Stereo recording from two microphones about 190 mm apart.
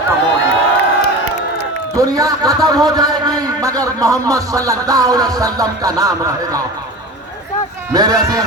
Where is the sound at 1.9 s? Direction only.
20° right (ahead or behind).